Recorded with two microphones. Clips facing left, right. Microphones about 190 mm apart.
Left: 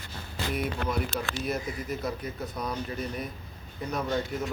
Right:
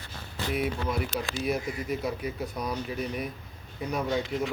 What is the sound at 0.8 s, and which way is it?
Speech, 65° left (ahead or behind).